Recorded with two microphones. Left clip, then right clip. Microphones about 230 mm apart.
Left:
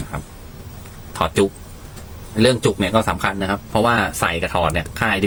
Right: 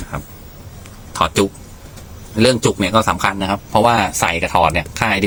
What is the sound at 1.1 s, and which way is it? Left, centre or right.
A man's voice, centre.